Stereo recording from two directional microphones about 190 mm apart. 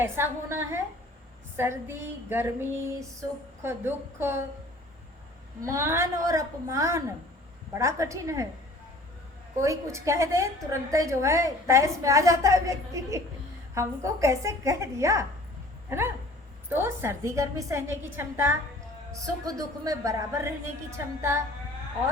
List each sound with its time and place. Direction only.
0.0 s a woman's voice: 15° right (ahead or behind)
5.6 s a woman's voice: 15° right (ahead or behind)
9.6 s a woman's voice: 15° right (ahead or behind)
16.6 s a woman's voice: 10° right (ahead or behind)